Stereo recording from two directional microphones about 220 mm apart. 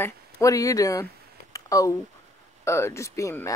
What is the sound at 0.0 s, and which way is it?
Speech, 15° left (ahead or behind).